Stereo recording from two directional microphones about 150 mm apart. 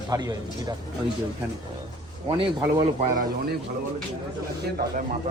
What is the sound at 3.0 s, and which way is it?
Speech, 75° right (ahead or behind).